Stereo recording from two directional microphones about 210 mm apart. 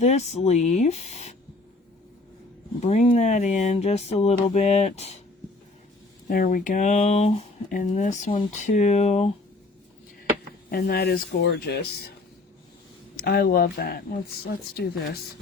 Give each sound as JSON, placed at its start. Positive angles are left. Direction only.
{"t": 0.0, "sound": "speech", "side_deg": 30}
{"t": 2.8, "sound": "speech", "side_deg": 35}
{"t": 6.2, "sound": "speech", "side_deg": 40}
{"t": 10.7, "sound": "speech", "side_deg": 45}
{"t": 13.1, "sound": "speech", "side_deg": 45}